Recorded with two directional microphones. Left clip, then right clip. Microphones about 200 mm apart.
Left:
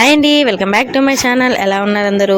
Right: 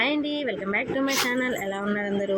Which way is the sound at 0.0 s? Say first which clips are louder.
Left 16 dB; 50° left (ahead or behind).